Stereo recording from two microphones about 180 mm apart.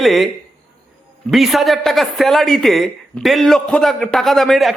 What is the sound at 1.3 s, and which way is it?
A woman's voice, centre (ahead or behind).